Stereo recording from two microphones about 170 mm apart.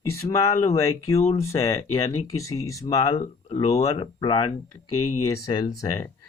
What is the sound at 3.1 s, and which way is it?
Speech, 35° left (ahead or behind).